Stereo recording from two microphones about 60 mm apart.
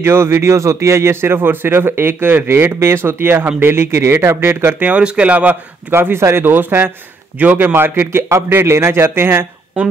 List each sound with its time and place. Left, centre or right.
0.0 s speech: right
4.8 s speech: centre
5.9 s speech: right